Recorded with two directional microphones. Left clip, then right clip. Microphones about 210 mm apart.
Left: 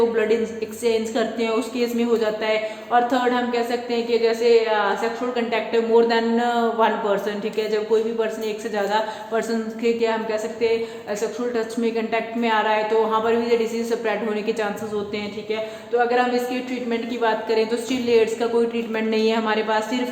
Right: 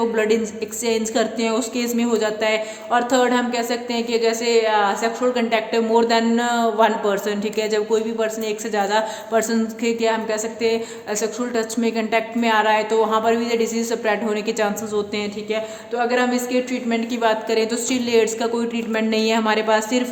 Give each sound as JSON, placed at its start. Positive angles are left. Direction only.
{"t": 0.9, "sound": "a man's voice", "side_deg": -45}